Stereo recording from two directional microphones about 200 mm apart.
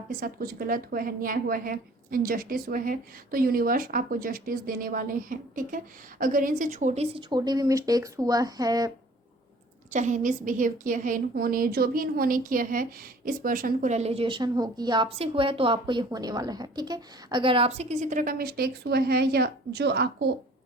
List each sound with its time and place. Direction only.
0.2 s a woman's voice: 45° right (ahead or behind); by 8.9 s 20° right (ahead or behind)
9.9 s a woman's voice: 40° right (ahead or behind); by 20.3 s 55° right (ahead or behind)